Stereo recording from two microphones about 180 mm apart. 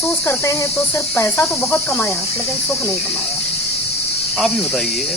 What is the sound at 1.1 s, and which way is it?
Speech, 15° left (ahead or behind).